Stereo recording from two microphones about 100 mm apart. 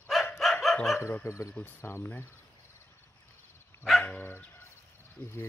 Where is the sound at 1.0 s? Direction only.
25° left (ahead or behind).